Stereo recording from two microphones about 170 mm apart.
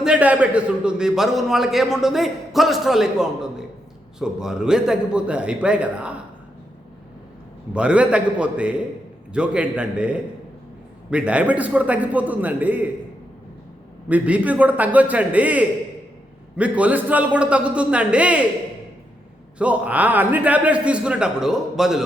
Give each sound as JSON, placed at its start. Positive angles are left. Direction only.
{"t": 0.0, "sound": "a man's voice", "side_deg": -5}
{"t": 7.7, "sound": "a man's voice", "side_deg": -5}
{"t": 14.1, "sound": "a man's voice", "side_deg": -10}
{"t": 19.5, "sound": "a man's voice", "side_deg": -10}